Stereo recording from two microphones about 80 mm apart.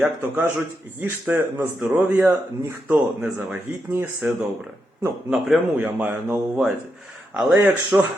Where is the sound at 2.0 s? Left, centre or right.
Right.